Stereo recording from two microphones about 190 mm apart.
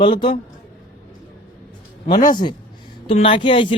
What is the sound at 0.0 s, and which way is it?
Speech, 25° left (ahead or behind).